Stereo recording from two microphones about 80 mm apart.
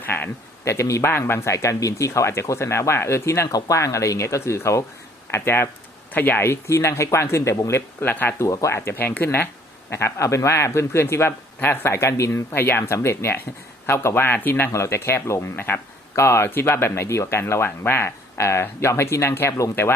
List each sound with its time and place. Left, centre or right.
0.0 s speech: left
7.7 s speech: left
8.4 s speech: left
9.9 s speech: left
14.7 s speech: left